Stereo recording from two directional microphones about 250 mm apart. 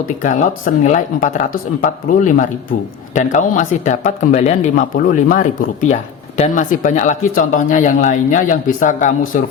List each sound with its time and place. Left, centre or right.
0.2 s speech: left